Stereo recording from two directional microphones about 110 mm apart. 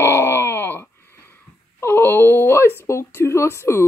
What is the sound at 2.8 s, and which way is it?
Speech, 25° left (ahead or behind).